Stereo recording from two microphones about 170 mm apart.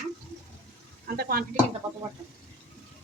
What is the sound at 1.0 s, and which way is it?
Speech, 65° right (ahead or behind).